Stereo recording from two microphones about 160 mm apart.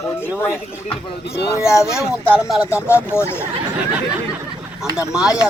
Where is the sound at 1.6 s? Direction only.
20° left (ahead or behind).